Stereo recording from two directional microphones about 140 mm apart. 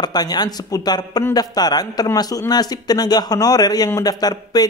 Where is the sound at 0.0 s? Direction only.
30° left (ahead or behind).